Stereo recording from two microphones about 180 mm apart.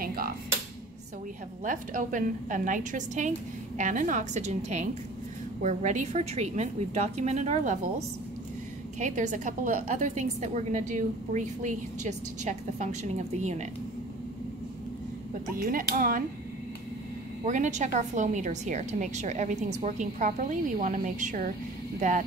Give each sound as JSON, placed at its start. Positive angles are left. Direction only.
{"t": 0.0, "sound": "dishes", "side_deg": -55}
{"t": 1.6, "sound": "a woman's voice", "side_deg": -45}
{"t": 9.0, "sound": "a woman's voice", "side_deg": -45}
{"t": 15.5, "sound": "a woman's voice", "side_deg": -50}
{"t": 17.5, "sound": "a woman's voice", "side_deg": -40}